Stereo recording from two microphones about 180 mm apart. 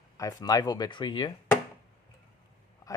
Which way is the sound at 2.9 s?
20° left (ahead or behind).